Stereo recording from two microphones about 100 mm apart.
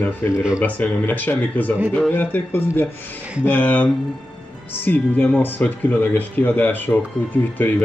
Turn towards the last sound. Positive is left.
turn(degrees=20)  # may be behind; listen again after turning